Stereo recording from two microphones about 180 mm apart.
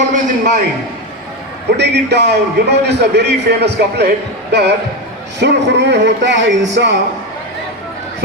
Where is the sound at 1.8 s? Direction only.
70° right (ahead or behind).